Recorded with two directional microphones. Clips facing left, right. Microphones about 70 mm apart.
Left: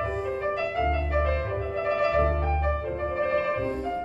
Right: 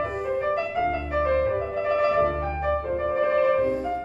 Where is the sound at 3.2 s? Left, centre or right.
Right.